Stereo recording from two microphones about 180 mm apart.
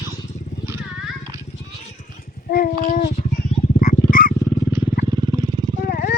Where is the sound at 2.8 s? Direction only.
55° left (ahead or behind).